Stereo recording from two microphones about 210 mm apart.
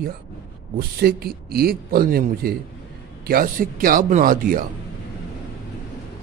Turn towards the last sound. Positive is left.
turn(degrees=-40)  # may be behind; listen again after turning